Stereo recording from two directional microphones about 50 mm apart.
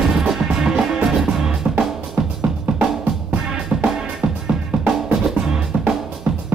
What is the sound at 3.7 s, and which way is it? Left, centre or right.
Music, right.